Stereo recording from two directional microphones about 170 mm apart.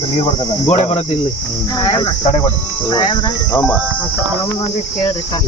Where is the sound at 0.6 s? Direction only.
40° left (ahead or behind).